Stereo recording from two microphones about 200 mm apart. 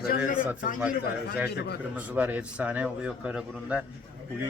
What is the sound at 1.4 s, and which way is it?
Speech, 55° left (ahead or behind).